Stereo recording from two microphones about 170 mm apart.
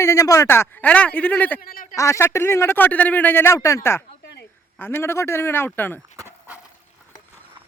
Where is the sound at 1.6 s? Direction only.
55° left (ahead or behind).